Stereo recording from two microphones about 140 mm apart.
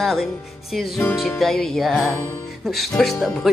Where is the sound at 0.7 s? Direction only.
10° left (ahead or behind).